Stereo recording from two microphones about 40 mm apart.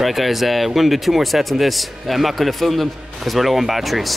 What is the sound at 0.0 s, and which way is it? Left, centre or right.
Speech, centre.